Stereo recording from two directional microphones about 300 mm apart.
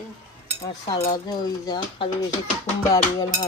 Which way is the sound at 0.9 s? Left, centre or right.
Centre.